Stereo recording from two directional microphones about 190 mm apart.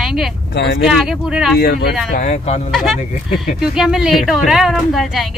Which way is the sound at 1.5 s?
55° left (ahead or behind).